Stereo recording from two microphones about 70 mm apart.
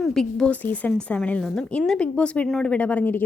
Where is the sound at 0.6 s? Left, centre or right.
Left.